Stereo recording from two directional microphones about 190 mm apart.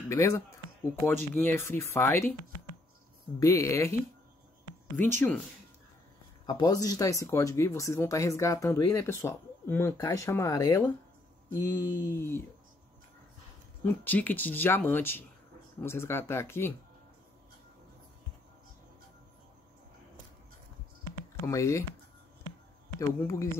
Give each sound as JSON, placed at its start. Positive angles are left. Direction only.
{"t": 0.1, "sound": "speech", "side_deg": 15}
{"t": 3.3, "sound": "speech", "side_deg": 15}
{"t": 6.4, "sound": "speech", "side_deg": 20}
{"t": 13.8, "sound": "speech", "side_deg": 10}
{"t": 21.5, "sound": "speech", "side_deg": 15}
{"t": 22.9, "sound": "speech", "side_deg": 15}